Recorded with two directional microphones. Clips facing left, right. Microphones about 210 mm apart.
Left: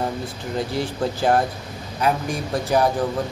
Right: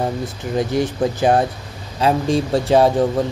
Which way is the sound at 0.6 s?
20° right (ahead or behind).